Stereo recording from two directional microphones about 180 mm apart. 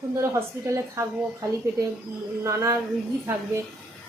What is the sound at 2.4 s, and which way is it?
Speech, 15° right (ahead or behind).